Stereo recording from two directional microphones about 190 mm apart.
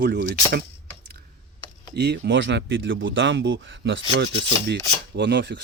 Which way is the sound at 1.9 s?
65° right (ahead or behind).